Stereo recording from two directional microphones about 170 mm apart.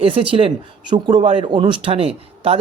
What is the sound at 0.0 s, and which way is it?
Speech, 30° right (ahead or behind).